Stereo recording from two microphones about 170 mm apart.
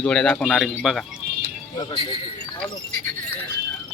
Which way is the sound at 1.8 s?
25° left (ahead or behind).